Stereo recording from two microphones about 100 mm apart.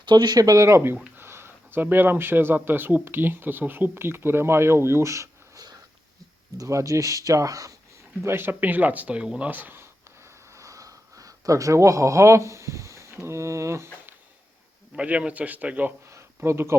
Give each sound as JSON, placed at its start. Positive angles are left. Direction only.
{"t": 0.0, "sound": "speech", "side_deg": -45}
{"t": 8.2, "sound": "speech", "side_deg": -25}
{"t": 14.9, "sound": "a man's voice", "side_deg": -10}
{"t": 16.0, "sound": "a sound", "side_deg": -25}